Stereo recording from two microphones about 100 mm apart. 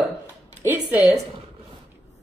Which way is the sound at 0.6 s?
20° right (ahead or behind).